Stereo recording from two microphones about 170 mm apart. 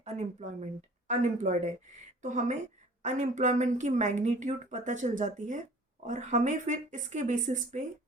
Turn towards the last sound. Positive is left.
turn(degrees=-45)  # may be behind; listen again after turning